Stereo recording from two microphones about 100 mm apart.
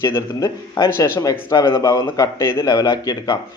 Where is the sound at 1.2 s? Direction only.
35° left (ahead or behind).